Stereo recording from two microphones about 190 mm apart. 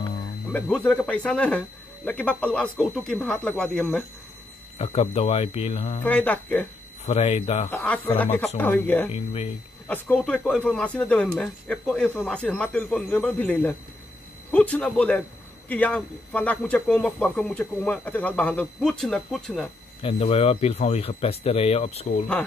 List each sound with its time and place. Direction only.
0.5 s speech: 5° left (ahead or behind)
4.7 s speech: 30° left (ahead or behind)
6.0 s speech: 10° left (ahead or behind)
7.1 s speech: 30° left (ahead or behind)
7.7 s speech: 5° left (ahead or behind)
9.1 s speech: 30° left (ahead or behind)
9.8 s speech: 10° left (ahead or behind)
20.0 s speech: 30° left (ahead or behind)